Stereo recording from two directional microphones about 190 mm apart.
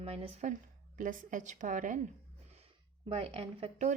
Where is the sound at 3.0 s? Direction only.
30° right (ahead or behind).